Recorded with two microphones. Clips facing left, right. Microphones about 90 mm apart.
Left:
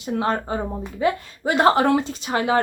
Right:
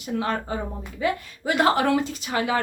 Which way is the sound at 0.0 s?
30° left (ahead or behind).